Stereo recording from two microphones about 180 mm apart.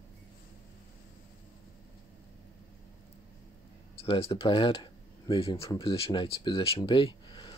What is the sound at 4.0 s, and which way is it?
Speech, 30° left (ahead or behind).